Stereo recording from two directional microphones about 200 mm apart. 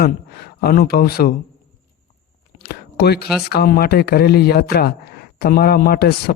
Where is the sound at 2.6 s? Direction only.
50° left (ahead or behind).